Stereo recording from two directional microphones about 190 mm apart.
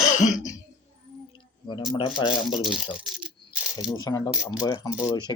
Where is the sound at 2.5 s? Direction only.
Centre (ahead or behind).